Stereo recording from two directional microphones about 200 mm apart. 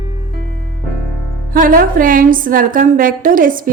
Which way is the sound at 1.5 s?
45° right (ahead or behind).